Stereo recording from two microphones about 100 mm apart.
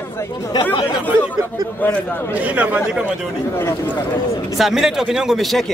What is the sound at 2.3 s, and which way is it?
Speech, 15° right (ahead or behind).